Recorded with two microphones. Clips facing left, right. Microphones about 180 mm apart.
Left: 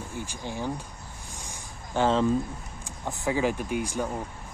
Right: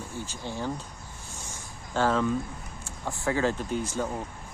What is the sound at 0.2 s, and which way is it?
Speech, 15° left (ahead or behind).